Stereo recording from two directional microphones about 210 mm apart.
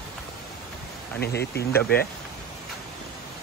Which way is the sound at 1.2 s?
50° left (ahead or behind).